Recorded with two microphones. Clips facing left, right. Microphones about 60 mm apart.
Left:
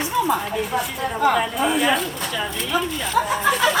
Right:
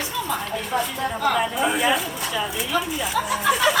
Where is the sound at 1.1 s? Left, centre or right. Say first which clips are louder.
Left 4 dB; left.